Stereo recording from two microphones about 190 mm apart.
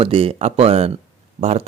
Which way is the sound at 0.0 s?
30° right (ahead or behind).